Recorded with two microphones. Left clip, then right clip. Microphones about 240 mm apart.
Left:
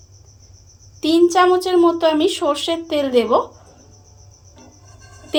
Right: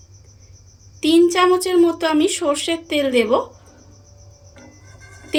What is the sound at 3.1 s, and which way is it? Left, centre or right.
Speech, right.